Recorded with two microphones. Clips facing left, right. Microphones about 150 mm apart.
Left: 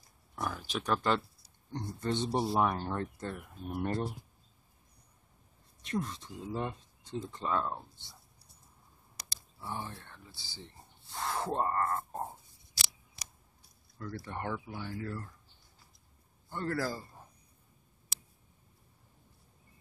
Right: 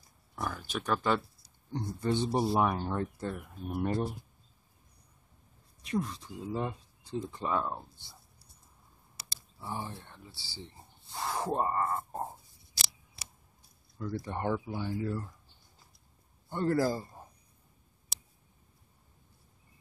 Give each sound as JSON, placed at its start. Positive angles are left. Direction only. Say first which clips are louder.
{"t": 0.4, "sound": "speech", "louder": "even", "side_deg": 0}
{"t": 5.9, "sound": "speech", "louder": "right 2 dB", "side_deg": -5}
{"t": 9.2, "sound": "a sound", "louder": "right 1 dB", "side_deg": -15}
{"t": 10.6, "sound": "speech", "louder": "right 4 dB", "side_deg": -10}
{"t": 13.9, "sound": "speech", "louder": "right 4 dB", "side_deg": -15}
{"t": 16.4, "sound": "a man's voice", "louder": "right 6 dB", "side_deg": -20}